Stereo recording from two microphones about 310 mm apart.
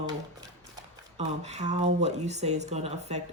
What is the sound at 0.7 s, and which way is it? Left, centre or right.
Speech, centre.